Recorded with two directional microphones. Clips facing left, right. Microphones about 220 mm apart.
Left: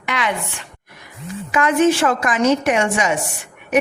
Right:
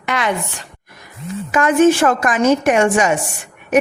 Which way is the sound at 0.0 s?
45° right (ahead or behind).